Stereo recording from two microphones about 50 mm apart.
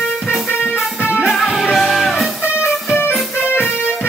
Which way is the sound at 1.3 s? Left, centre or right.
Centre.